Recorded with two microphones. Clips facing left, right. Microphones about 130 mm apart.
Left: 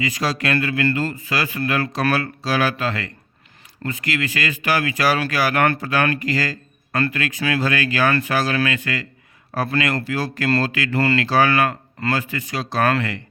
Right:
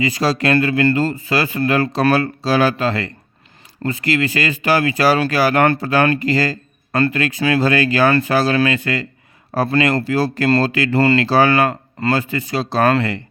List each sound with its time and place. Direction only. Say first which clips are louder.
0.0 s speech: right 5 dB; 30° right (ahead or behind)